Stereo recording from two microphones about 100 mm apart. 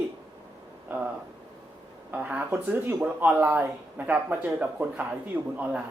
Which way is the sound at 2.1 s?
15° right (ahead or behind).